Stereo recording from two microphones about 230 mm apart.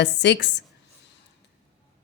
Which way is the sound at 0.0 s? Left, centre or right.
Left.